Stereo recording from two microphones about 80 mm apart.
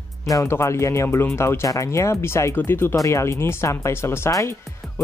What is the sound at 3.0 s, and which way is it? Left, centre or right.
Speech, left.